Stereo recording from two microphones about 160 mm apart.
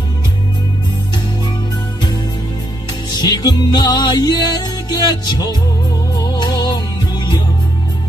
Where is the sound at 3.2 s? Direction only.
25° left (ahead or behind).